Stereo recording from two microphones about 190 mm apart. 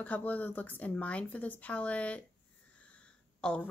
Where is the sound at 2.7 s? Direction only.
5° left (ahead or behind).